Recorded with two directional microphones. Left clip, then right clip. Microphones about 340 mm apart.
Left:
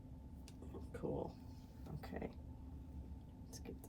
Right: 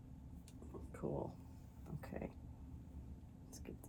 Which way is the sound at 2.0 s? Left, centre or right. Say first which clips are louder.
Even; centre.